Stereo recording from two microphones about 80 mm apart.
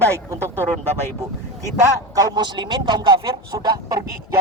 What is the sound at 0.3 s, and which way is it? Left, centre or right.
Speech, right.